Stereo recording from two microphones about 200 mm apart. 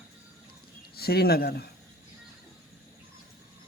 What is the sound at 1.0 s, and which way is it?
Speech, 50° left (ahead or behind).